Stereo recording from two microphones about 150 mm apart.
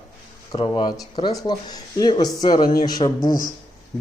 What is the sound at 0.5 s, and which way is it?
A man's voice, 35° left (ahead or behind).